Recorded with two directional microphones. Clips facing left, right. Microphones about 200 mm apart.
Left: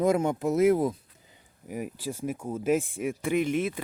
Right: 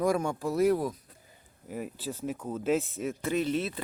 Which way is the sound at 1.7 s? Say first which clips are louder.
Left 2 dB; 10° left (ahead or behind).